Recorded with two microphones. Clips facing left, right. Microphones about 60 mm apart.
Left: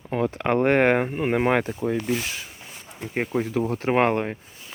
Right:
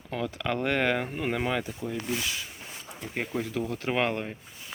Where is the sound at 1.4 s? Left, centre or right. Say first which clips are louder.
Left 8 dB; left.